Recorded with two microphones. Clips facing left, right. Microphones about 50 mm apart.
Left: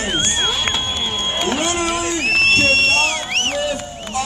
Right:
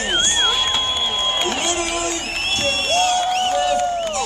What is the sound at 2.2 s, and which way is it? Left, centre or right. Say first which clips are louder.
Crowd: left 8 dB; left.